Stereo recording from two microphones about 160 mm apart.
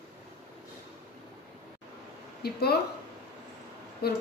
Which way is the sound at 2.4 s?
80° left.